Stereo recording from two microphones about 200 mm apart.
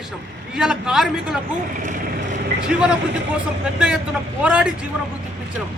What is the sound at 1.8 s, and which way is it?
Vehicle, 40° right (ahead or behind).